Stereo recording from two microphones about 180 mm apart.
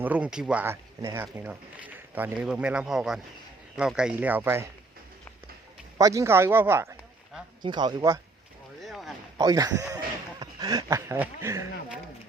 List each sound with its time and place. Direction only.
0.0 s speech: 10° right (ahead or behind)
6.0 s speech: 20° right (ahead or behind)
7.6 s speech: 25° right (ahead or behind)
8.8 s a sound: centre (ahead or behind)
9.4 s speech: 20° right (ahead or behind)